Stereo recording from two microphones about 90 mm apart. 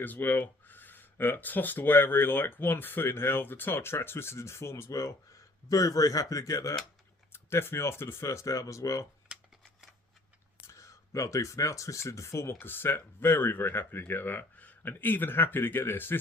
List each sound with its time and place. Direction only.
0.0 s speech: 20° left (ahead or behind); by 9.0 s 35° left (ahead or behind)
9.3 s a sound: 10° right (ahead or behind)
10.7 s speech: 35° left (ahead or behind)